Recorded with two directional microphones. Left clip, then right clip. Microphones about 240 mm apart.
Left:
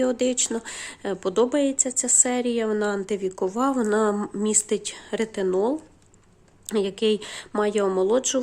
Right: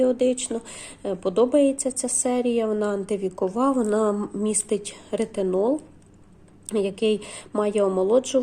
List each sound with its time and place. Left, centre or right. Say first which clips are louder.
0.0 s speech: right 2 dB; left